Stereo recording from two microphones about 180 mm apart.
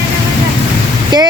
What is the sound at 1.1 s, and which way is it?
Speech, 25° right (ahead or behind).